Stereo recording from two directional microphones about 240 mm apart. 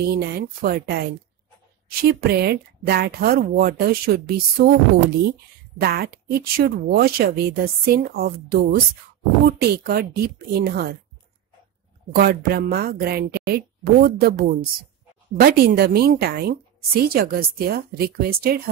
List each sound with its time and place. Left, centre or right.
0.0 s a woman's voice: right
5.8 s a woman's voice: right
12.1 s a woman's voice: right